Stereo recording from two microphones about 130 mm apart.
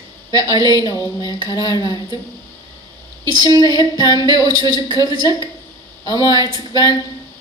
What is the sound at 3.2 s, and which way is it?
Music, 30° right (ahead or behind).